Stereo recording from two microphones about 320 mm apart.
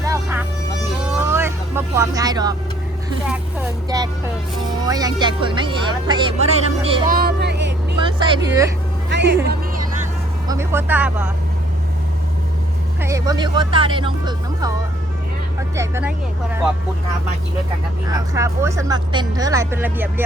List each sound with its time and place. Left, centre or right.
0.0 s music: centre
1.3 s vehicle: centre
3.8 s speech: centre
7.2 s vehicle: right
8.0 s speech: centre
9.0 s music: right
9.5 s a sound: right
10.5 s speech: centre
13.0 s speech: centre
15.7 s speech: centre
18.0 s speech: centre